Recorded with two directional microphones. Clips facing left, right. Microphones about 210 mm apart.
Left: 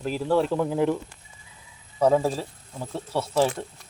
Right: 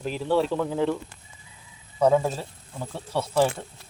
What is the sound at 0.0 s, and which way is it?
Speech, 5° left (ahead or behind).